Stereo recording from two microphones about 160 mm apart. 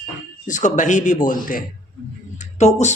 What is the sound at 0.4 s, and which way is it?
Speech, 50° left (ahead or behind).